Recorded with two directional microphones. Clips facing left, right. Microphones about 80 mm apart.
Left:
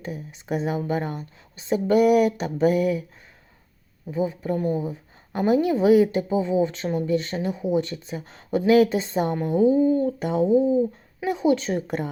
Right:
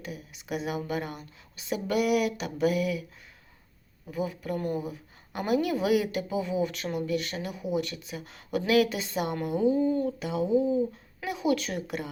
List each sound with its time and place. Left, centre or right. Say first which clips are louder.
0.0 s speech: left 6 dB; left
4.1 s a woman's voice: left 6 dB; left
10.2 s speech: left 6 dB; left